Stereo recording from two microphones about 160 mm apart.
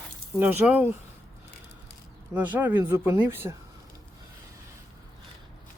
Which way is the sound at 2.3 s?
10° right (ahead or behind).